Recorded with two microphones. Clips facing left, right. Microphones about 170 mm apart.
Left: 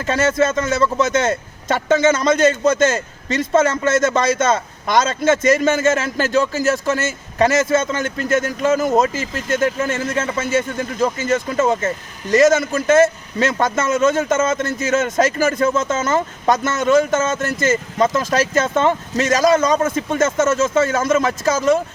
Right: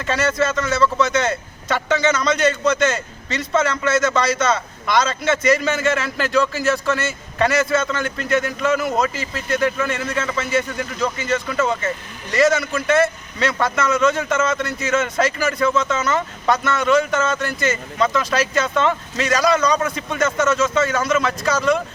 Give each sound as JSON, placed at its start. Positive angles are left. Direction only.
{"t": 0.0, "sound": "a man's voice", "side_deg": 45}